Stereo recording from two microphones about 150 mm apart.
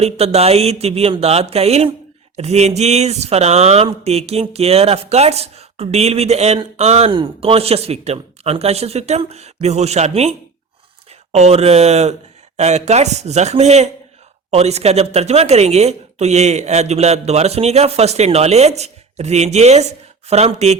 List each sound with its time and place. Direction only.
0.0 s speech: 45° right (ahead or behind)